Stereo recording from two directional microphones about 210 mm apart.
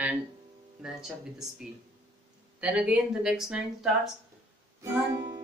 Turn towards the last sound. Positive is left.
turn(degrees=-20)  # may be behind; listen again after turning